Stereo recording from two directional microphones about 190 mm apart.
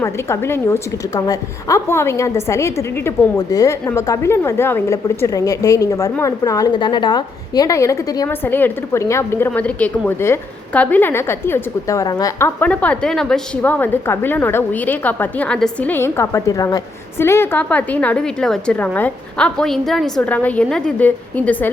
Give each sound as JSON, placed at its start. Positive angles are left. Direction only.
{"t": 0.0, "sound": "a woman's voice", "side_deg": 15}